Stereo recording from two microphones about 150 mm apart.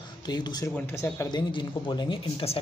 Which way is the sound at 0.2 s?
30° left (ahead or behind).